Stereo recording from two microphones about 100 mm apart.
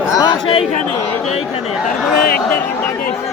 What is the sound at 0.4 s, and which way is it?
Chatter, 70° left (ahead or behind).